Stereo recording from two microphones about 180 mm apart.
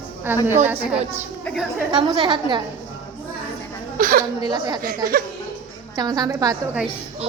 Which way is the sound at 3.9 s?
50° right (ahead or behind).